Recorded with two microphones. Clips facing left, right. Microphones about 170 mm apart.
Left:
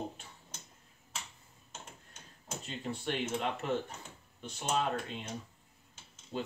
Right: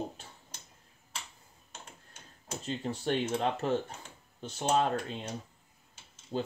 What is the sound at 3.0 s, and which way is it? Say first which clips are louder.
Speech: right 4 dB; 40° right (ahead or behind).